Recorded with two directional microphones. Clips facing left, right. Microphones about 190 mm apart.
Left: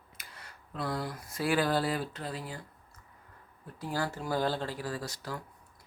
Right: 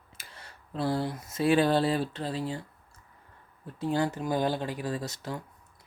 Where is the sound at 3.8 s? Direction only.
20° right (ahead or behind).